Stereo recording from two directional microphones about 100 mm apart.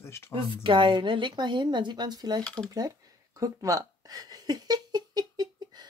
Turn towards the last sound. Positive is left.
turn(degrees=-40)  # may be behind; listen again after turning